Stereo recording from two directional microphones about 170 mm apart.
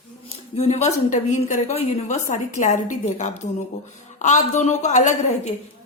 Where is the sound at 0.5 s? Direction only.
40° left (ahead or behind).